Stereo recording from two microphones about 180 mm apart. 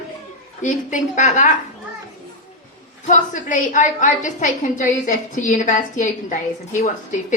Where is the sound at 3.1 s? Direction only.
45° left (ahead or behind).